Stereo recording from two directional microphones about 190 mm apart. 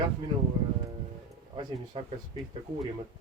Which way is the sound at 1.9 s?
30° right (ahead or behind).